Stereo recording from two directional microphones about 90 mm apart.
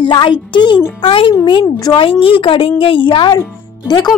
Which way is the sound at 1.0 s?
75° left (ahead or behind).